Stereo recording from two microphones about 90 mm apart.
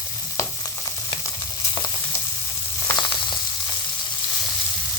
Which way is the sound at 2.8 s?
55° left (ahead or behind).